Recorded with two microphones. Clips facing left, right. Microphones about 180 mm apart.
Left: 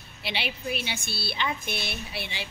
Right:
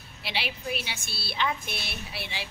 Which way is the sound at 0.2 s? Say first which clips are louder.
Left 1 dB; centre (ahead or behind).